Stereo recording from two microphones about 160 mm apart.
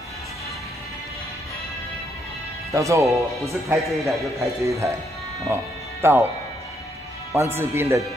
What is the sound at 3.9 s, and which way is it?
Speech, centre (ahead or behind).